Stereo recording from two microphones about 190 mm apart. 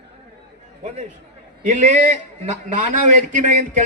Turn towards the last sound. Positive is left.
turn(degrees=-40)  # may be behind; listen again after turning